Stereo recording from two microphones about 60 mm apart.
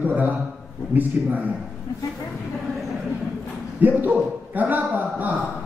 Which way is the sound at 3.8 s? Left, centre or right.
Right.